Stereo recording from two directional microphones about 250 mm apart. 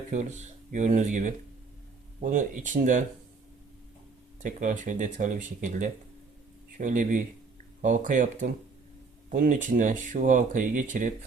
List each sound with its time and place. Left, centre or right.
0.1 s speech: right
4.4 s speech: right